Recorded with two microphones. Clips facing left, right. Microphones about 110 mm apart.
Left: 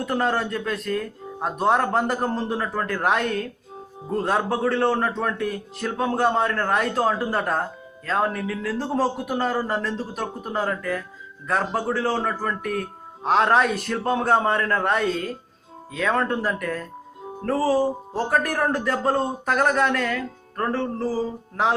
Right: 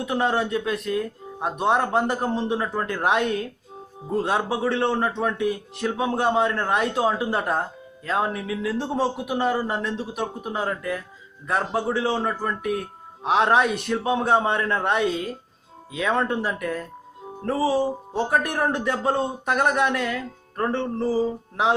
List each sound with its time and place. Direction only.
0.0 s speech: 10° right (ahead or behind)
4.1 s a man's voice: 5° right (ahead or behind)
9.5 s speech: 15° right (ahead or behind)
17.5 s a man's voice: centre (ahead or behind)
18.3 s a man's voice: 15° right (ahead or behind)
19.0 s a man's voice: centre (ahead or behind)
19.5 s speech: 15° right (ahead or behind)